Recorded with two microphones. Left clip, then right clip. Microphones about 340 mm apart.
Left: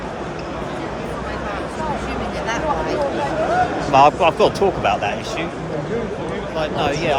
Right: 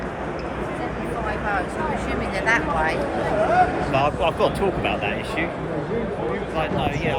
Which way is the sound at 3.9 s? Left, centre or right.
Left.